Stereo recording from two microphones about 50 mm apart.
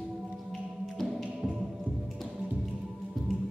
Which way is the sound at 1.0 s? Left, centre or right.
Centre.